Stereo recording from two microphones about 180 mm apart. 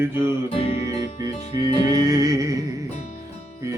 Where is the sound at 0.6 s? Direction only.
30° left (ahead or behind).